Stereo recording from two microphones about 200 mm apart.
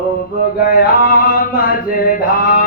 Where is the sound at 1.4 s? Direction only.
45° left (ahead or behind).